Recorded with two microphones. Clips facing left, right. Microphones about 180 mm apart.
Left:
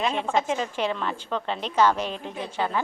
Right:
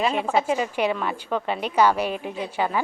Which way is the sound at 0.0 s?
10° right (ahead or behind).